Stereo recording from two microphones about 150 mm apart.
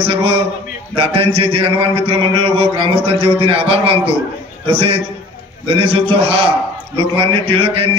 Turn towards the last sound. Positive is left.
turn(degrees=-40)  # may be behind; listen again after turning